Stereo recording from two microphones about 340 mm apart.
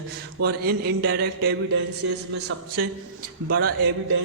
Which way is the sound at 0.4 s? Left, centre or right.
Right.